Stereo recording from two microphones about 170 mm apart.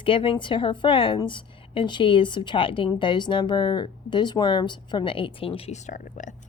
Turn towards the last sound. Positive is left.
turn(degrees=45)  # may be behind; listen again after turning